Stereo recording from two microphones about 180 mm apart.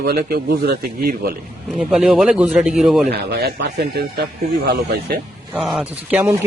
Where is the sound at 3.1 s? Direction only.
60° right (ahead or behind).